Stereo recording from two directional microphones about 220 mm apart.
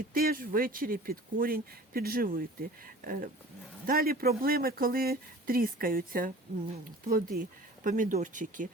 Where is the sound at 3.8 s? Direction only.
40° right (ahead or behind).